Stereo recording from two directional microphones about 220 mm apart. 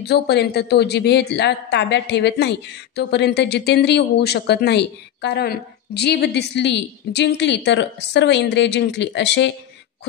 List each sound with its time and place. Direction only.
0.0 s speech: 50° left (ahead or behind)